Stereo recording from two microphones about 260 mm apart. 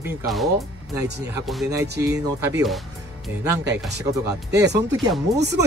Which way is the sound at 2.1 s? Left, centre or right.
Centre.